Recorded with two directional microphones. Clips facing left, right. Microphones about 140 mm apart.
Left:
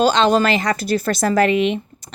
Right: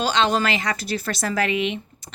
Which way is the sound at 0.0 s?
40° left (ahead or behind).